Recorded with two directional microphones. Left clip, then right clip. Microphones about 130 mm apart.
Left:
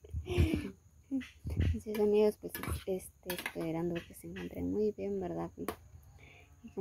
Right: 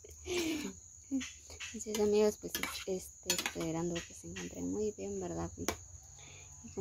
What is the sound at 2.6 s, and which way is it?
Dishes, 25° right (ahead or behind).